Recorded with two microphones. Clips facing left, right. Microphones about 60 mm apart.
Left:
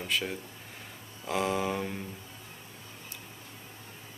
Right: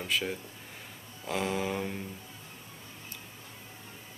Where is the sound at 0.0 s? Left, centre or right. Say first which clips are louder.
Even; centre.